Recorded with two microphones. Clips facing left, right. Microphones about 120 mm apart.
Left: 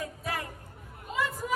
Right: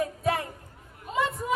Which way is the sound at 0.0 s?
25° right (ahead or behind).